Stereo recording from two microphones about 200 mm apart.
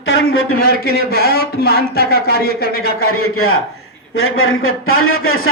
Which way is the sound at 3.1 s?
90° left.